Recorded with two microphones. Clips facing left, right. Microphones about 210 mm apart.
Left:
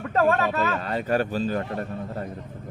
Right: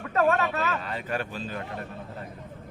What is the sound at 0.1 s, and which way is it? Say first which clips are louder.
Speech: left 2 dB; 35° left (ahead or behind).